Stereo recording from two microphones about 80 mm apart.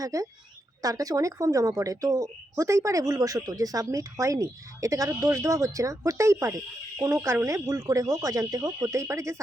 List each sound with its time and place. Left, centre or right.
0.0 s speech: right
6.1 s insect: right